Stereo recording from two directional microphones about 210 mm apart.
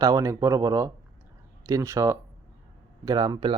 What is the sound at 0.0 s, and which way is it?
Speech, 15° right (ahead or behind).